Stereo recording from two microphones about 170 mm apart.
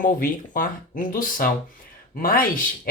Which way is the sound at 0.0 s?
55° left (ahead or behind).